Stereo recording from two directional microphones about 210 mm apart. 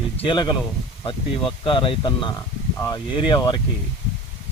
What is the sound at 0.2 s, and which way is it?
Speech, 25° left (ahead or behind).